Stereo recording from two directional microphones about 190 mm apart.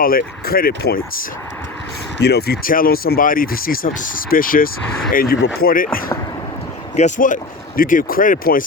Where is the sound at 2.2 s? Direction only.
55° left (ahead or behind).